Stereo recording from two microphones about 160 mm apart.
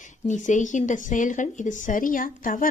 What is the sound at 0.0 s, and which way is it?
Speech, 50° left (ahead or behind).